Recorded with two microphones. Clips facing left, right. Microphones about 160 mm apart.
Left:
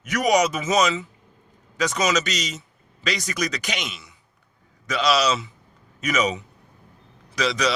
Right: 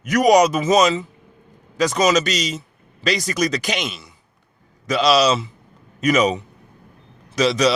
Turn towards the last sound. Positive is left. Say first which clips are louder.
# right 6 dB
turn(degrees=-25)  # may be behind; listen again after turning